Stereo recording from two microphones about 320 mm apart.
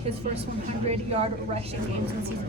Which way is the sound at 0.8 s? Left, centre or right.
Centre.